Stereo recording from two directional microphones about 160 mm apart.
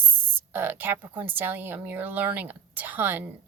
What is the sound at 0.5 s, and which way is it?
A woman's voice, 10° right (ahead or behind).